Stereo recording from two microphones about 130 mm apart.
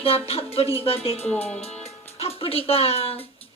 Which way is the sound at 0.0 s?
50° left (ahead or behind).